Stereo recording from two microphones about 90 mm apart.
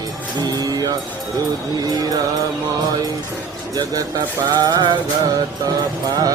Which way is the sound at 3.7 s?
40° right (ahead or behind).